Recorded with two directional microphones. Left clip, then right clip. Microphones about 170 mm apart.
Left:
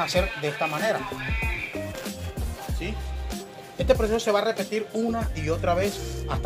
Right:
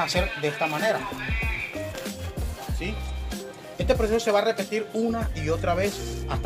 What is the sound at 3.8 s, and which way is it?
Speech, 30° left (ahead or behind).